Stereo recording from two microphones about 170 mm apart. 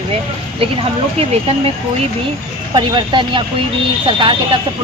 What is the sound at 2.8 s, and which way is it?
Speech, 30° right (ahead or behind).